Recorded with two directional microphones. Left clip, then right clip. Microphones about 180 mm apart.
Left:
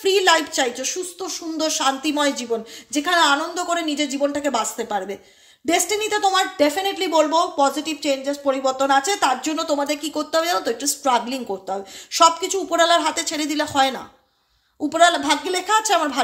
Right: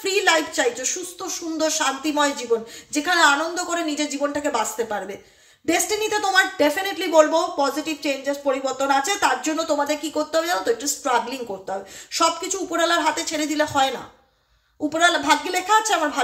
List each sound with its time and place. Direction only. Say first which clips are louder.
0.0 s a woman's voice: left 3 dB; 35° left (ahead or behind)